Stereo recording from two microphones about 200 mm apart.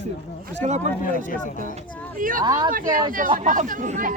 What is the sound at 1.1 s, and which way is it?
Speech, 40° left (ahead or behind).